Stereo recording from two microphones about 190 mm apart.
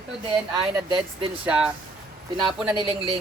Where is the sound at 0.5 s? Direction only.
25° right (ahead or behind).